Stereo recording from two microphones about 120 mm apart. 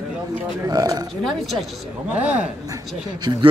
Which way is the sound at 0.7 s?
30° right (ahead or behind).